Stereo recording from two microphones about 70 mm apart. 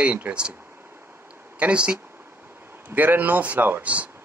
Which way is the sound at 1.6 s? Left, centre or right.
Centre.